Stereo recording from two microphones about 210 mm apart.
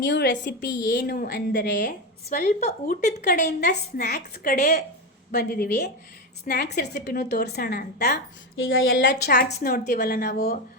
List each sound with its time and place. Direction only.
0.1 s a woman's voice: 45° left (ahead or behind)
1.8 s speech: 40° left (ahead or behind)
3.4 s a woman's voice: 50° left (ahead or behind)
4.5 s speech: 35° left (ahead or behind)
5.3 s a woman's voice: 45° left (ahead or behind)
8.5 s a woman's voice: 70° left (ahead or behind); by 10.4 s 45° left (ahead or behind)